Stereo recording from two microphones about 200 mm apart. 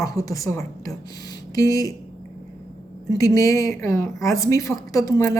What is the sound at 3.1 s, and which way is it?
Speech, 15° left (ahead or behind).